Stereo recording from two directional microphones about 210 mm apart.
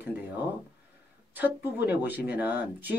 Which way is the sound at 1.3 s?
10° right (ahead or behind).